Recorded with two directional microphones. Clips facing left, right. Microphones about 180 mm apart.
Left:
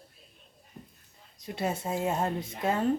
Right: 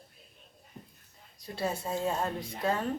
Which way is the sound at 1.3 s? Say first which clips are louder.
Left 2 dB; 20° left (ahead or behind).